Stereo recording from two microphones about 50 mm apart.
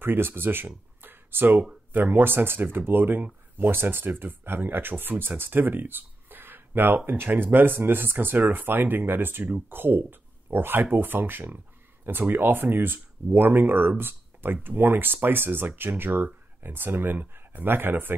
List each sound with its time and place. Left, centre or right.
0.0 s speech: right